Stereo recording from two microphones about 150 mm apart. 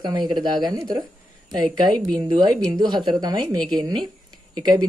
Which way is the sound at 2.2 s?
35° right (ahead or behind).